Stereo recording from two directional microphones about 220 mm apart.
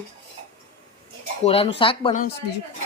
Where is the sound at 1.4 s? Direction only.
25° left (ahead or behind).